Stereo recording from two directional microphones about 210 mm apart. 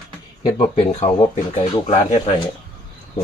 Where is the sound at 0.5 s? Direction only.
25° left (ahead or behind).